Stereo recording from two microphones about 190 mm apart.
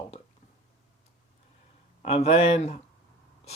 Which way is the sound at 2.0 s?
30° left (ahead or behind).